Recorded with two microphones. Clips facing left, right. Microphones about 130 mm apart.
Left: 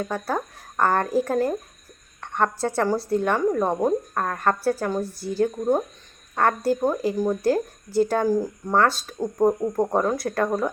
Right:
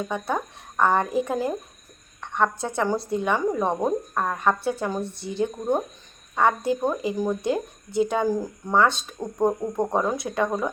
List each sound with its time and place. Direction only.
0.1 s speech: 5° left (ahead or behind)
0.9 s a woman's voice: 20° right (ahead or behind)
1.3 s speech: 5° right (ahead or behind)
2.4 s a woman's voice: 20° right (ahead or behind)
3.2 s speech: centre (ahead or behind)